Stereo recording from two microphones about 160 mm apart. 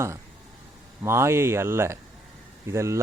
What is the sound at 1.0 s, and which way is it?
Speech, 15° right (ahead or behind).